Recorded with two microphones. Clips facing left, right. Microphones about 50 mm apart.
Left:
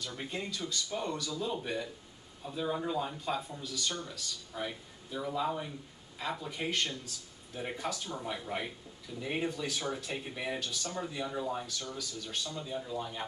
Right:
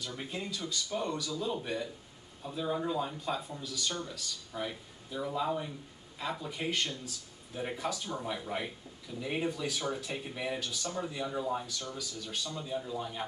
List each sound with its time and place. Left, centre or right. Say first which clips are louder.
0.0 s speech: even; centre